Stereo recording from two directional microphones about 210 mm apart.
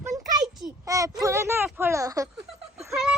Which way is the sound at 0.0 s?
20° right (ahead or behind).